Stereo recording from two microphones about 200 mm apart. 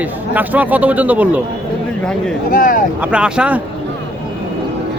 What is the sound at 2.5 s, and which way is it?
Speech, 45° left (ahead or behind).